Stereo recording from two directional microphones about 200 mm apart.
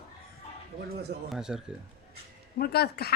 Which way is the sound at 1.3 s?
Centre (ahead or behind).